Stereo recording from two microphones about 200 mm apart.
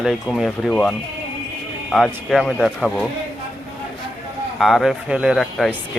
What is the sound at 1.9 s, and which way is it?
Speech, centre (ahead or behind).